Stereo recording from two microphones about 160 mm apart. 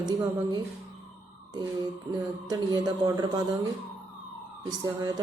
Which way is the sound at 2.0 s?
25° right (ahead or behind).